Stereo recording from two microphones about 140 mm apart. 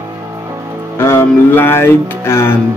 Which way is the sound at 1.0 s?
15° left (ahead or behind).